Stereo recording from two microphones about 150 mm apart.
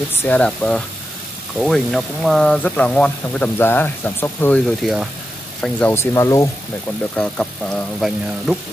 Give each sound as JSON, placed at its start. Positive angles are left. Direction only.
{"t": 0.1, "sound": "speech", "side_deg": 10}
{"t": 4.6, "sound": "speech", "side_deg": 0}
{"t": 5.6, "sound": "speech", "side_deg": 10}
{"t": 7.2, "sound": "speech", "side_deg": 10}